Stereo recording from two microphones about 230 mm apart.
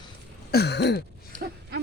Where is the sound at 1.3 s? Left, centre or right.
Right.